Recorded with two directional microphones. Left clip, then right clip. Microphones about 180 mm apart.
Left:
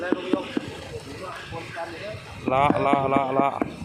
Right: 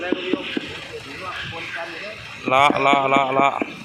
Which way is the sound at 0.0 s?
40° left (ahead or behind).